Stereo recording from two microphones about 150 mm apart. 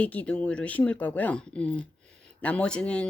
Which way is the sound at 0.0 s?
10° left (ahead or behind).